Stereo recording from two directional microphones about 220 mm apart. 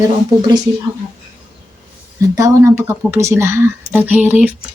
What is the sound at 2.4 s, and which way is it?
A woman's voice, 10° right (ahead or behind).